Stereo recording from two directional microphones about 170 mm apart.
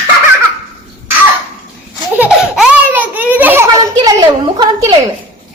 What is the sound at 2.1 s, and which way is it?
Baby laughter, 10° right (ahead or behind).